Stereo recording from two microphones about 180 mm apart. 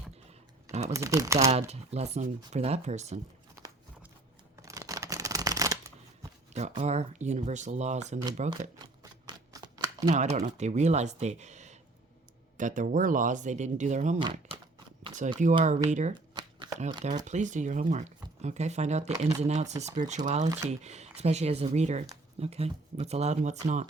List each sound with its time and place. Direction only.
0.7 s speech: 40° right (ahead or behind)
0.9 s speech: 20° right (ahead or behind)
1.5 s speech: 35° right (ahead or behind)
4.6 s a sound: 20° right (ahead or behind)
6.5 s speech: 40° right (ahead or behind)
8.4 s a sound: 25° right (ahead or behind)
10.1 s speech: 40° right (ahead or behind)
14.3 s a sound: 30° right (ahead or behind)
15.2 s speech: 45° right (ahead or behind)
16.3 s shuffling cards: 25° right (ahead or behind)
17.2 s speech: 40° right (ahead or behind)